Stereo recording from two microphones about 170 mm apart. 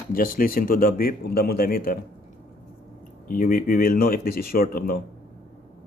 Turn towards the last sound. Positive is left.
turn(degrees=60)  # may be behind; listen again after turning